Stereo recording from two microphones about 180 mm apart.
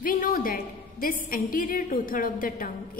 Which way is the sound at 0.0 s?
50° left (ahead or behind).